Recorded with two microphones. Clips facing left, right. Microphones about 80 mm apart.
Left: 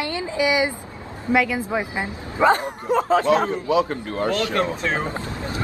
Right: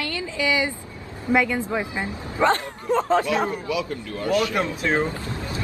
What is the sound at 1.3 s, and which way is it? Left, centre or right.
A woman's voice, centre.